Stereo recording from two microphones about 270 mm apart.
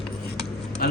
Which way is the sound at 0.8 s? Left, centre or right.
Left.